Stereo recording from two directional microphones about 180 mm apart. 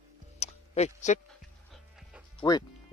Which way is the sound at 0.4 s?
40° left (ahead or behind).